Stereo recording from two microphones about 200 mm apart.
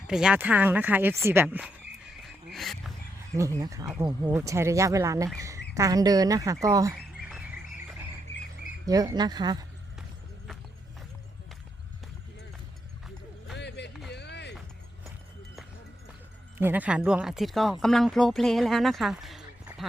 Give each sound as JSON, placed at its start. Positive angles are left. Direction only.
{"t": 0.1, "sound": "speech", "side_deg": -5}
{"t": 3.6, "sound": "speech", "side_deg": -15}
{"t": 8.9, "sound": "speech", "side_deg": -20}
{"t": 13.6, "sound": "a sound", "side_deg": 60}
{"t": 16.6, "sound": "speech", "side_deg": -10}